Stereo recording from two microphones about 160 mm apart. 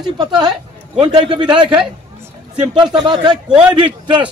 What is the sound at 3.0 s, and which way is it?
Speech, 25° right (ahead or behind).